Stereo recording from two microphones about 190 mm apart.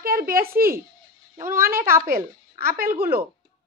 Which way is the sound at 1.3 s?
15° right (ahead or behind).